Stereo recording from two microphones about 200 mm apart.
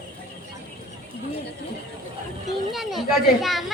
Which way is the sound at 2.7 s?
Centre (ahead or behind).